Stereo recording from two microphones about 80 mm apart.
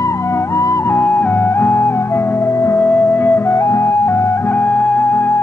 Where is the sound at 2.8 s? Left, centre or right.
Left.